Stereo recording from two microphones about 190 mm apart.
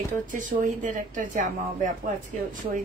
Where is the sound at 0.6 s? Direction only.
45° right (ahead or behind).